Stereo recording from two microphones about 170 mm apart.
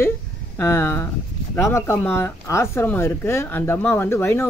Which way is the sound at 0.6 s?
15° left (ahead or behind).